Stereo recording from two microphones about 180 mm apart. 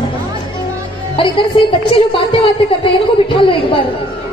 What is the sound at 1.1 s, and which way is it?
A woman's voice, 30° left (ahead or behind).